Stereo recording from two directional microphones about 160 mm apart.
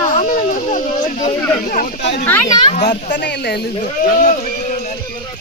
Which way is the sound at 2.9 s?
55° left (ahead or behind).